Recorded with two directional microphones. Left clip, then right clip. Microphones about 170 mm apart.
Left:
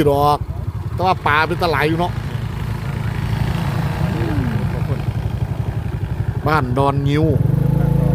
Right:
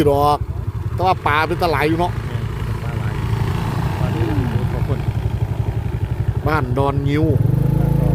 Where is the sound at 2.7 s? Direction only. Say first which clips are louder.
Right 1 dB; 45° left (ahead or behind); by 5.7 s 25° left (ahead or behind).